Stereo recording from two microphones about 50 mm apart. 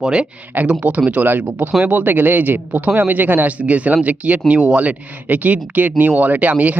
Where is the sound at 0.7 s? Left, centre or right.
Right.